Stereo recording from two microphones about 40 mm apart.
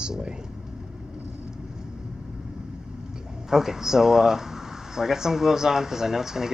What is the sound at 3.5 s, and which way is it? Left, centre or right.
Speech, centre.